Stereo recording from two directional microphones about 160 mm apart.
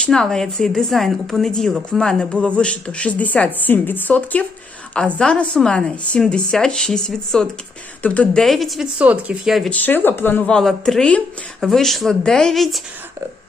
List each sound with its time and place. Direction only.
0.0 s a woman's voice: 5° left (ahead or behind)
9.8 s a woman's voice: 10° left (ahead or behind)